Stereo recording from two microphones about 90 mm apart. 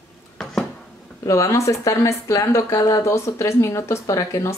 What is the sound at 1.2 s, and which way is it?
Speech, 35° left (ahead or behind).